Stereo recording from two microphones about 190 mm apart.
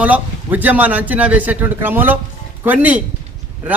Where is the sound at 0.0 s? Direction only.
10° right (ahead or behind).